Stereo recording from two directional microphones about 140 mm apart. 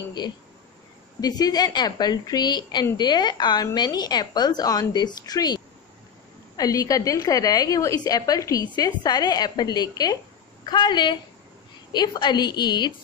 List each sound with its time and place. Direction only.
1.2 s a woman's voice: 25° left (ahead or behind)